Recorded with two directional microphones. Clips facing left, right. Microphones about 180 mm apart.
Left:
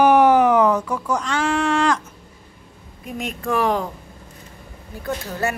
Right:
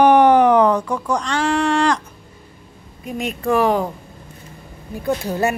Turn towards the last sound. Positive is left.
turn(degrees=-15)  # may be behind; listen again after turning